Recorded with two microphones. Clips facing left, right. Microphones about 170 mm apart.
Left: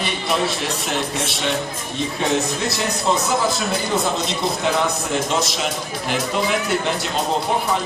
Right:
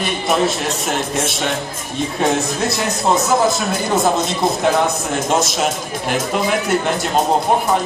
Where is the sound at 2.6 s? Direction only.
50° right (ahead or behind).